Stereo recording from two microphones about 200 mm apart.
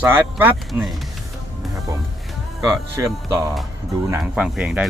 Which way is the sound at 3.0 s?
15° right (ahead or behind).